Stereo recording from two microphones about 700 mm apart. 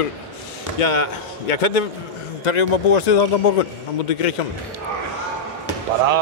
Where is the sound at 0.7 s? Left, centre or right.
Left.